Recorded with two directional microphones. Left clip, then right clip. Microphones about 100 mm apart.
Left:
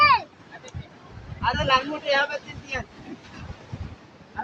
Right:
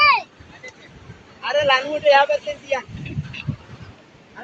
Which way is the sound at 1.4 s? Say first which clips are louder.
Right 4 dB; 45° left (ahead or behind).